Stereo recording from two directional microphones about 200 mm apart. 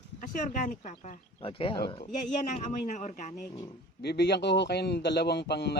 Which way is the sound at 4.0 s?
55° left (ahead or behind).